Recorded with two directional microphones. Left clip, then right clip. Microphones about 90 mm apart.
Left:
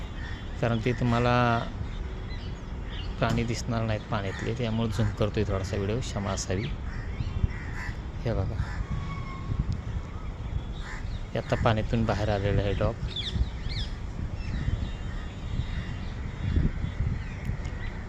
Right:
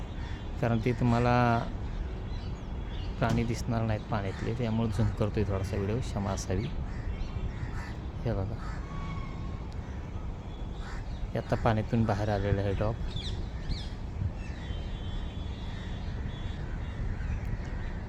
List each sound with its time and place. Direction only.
0.6 s speech: 15° right (ahead or behind)
3.2 s speech: 5° right (ahead or behind)
8.2 s speech: 10° right (ahead or behind)
11.3 s speech: 15° right (ahead or behind)